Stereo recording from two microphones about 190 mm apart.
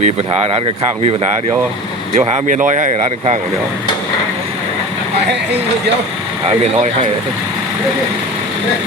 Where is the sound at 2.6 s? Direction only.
40° right (ahead or behind).